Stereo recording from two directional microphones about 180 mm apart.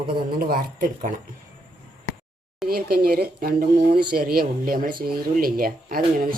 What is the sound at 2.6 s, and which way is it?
Speech, 55° right (ahead or behind).